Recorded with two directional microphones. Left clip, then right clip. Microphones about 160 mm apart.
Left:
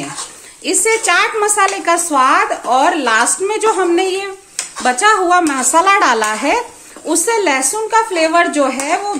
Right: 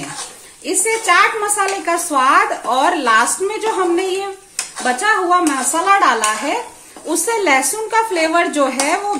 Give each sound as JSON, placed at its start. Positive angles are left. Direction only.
{"t": 0.7, "sound": "a woman's voice", "side_deg": 25}
{"t": 7.1, "sound": "speech", "side_deg": 20}